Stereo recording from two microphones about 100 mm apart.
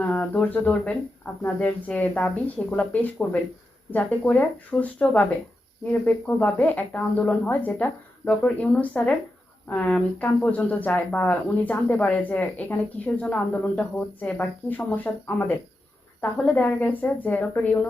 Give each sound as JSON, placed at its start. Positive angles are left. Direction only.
{"t": 0.0, "sound": "speech", "side_deg": 15}
{"t": 4.3, "sound": "speech", "side_deg": 15}